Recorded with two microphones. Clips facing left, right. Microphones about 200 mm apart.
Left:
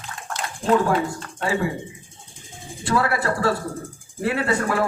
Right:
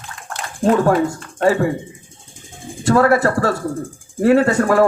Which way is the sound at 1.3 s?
50° right (ahead or behind).